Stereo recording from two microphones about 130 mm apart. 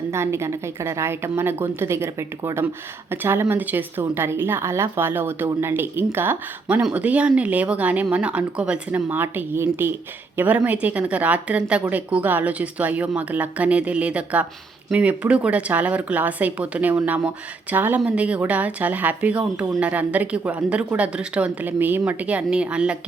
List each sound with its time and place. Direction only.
0.1 s a woman's voice: 20° right (ahead or behind)